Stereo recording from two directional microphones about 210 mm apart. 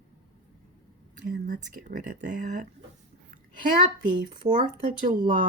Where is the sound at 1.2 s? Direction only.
40° right (ahead or behind).